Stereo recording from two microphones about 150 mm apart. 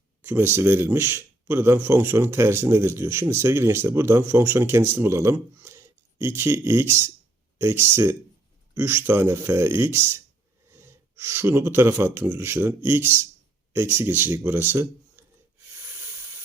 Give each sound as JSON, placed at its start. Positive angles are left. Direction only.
{"t": 0.2, "sound": "speech", "side_deg": -15}